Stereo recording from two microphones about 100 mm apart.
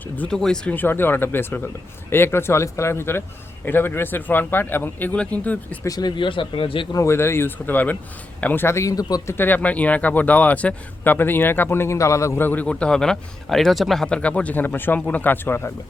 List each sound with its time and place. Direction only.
0.2 s speech: 5° left (ahead or behind)
0.8 s speech: 20° left (ahead or behind)
5.8 s speech: 40° left (ahead or behind); by 6.8 s 60° left (ahead or behind)
6.9 s speech: 30° left (ahead or behind)
9.4 s speech: 15° left (ahead or behind)